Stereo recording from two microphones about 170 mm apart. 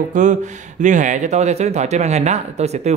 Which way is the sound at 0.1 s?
45° right (ahead or behind).